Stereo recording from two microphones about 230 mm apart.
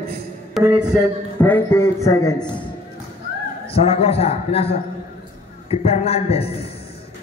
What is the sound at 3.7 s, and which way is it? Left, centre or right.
Speech, left.